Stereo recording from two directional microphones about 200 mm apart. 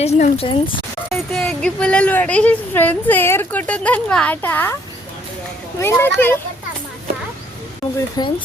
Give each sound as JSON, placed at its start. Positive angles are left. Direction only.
{"t": 0.0, "sound": "speech", "side_deg": 30}
{"t": 1.1, "sound": "a woman's voice", "side_deg": 0}
{"t": 5.8, "sound": "a woman's voice", "side_deg": 10}
{"t": 8.2, "sound": "speech", "side_deg": 20}